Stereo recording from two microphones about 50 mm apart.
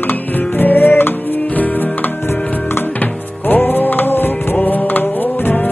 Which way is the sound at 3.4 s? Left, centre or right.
Left.